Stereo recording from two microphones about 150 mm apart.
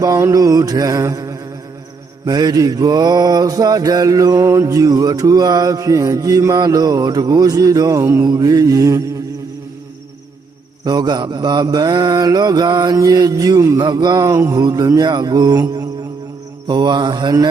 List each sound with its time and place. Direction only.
0.0 s mantra: 20° right (ahead or behind)
10.8 s mantra: 25° right (ahead or behind)